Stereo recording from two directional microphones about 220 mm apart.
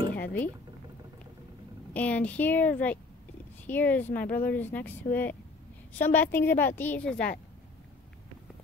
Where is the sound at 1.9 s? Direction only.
5° left (ahead or behind).